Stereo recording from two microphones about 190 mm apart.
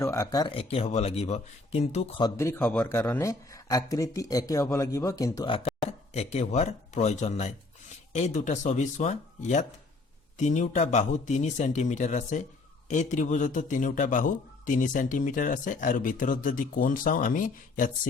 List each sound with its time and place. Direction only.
0.0 s speech: 15° left (ahead or behind); by 2.2 s 35° left (ahead or behind)
2.2 s a man's voice: 15° left (ahead or behind); by 18.1 s 45° left (ahead or behind)